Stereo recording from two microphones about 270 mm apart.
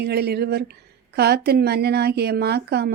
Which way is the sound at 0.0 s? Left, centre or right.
Right.